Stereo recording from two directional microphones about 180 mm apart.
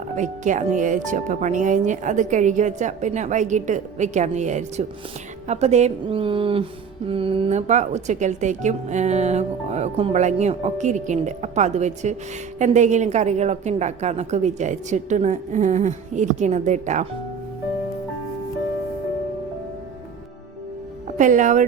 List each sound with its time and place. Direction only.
0.2 s a woman's voice: 45° right (ahead or behind)
21.2 s speech: 45° right (ahead or behind)